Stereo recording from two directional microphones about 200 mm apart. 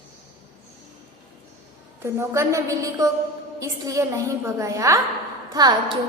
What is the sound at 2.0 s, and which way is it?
A woman's voice, 15° right (ahead or behind).